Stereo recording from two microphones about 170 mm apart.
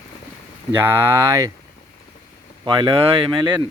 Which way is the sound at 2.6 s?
25° right (ahead or behind).